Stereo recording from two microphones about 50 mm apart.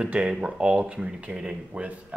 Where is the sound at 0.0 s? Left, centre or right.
Centre.